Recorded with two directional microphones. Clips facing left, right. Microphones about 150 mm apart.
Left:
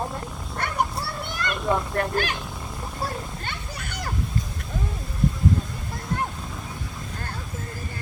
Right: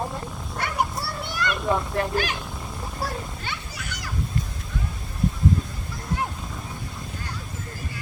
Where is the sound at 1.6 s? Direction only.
Centre (ahead or behind).